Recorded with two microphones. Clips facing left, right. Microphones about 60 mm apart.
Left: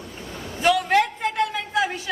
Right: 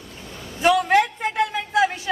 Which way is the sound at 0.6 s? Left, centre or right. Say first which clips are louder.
Right 2 dB; centre.